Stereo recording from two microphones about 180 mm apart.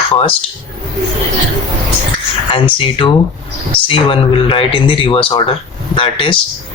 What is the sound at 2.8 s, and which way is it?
Speech, 30° left (ahead or behind).